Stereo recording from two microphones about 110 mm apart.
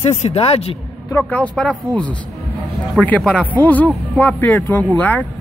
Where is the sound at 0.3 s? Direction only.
65° left (ahead or behind).